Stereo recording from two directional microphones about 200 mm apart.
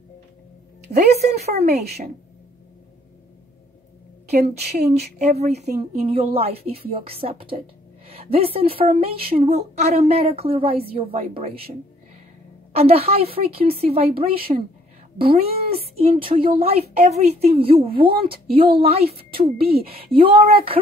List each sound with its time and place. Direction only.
0.9 s a woman's voice: 35° right (ahead or behind)
4.4 s a woman's voice: 55° right (ahead or behind)
4.8 s a woman's voice: 35° right (ahead or behind)
12.7 s a woman's voice: 30° right (ahead or behind)
15.1 s a woman's voice: 30° right (ahead or behind)